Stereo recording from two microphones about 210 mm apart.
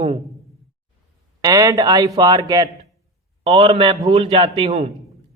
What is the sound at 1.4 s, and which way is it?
A man's voice, 15° right (ahead or behind).